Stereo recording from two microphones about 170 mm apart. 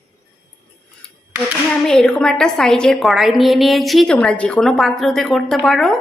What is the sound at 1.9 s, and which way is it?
A woman's voice, 5° left (ahead or behind).